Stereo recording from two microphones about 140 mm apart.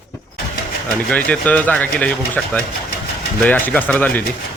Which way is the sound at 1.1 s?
10° left (ahead or behind).